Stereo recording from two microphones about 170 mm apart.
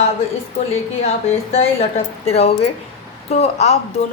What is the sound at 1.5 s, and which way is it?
A woman's voice, 35° left (ahead or behind).